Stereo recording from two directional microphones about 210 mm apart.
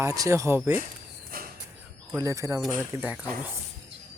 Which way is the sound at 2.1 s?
15° right (ahead or behind).